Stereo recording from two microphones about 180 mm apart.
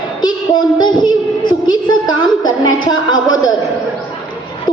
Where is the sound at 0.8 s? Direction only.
25° left (ahead or behind).